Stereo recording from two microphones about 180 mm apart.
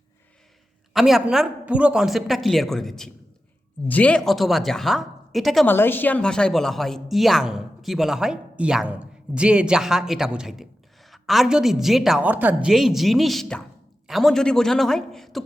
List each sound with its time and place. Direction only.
0.9 s speech: centre (ahead or behind)
5.6 s speech: 10° left (ahead or behind)